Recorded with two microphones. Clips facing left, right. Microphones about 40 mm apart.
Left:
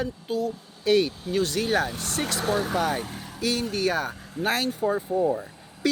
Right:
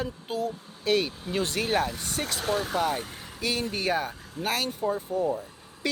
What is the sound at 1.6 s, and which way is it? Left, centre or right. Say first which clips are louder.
Speech: right 1 dB; centre.